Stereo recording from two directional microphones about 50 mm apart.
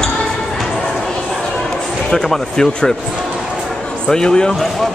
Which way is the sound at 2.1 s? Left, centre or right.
Centre.